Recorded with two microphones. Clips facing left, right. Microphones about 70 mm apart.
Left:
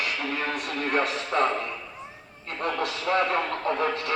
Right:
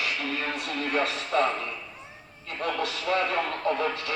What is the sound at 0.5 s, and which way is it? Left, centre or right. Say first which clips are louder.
A man's voice: left 1 dB; left.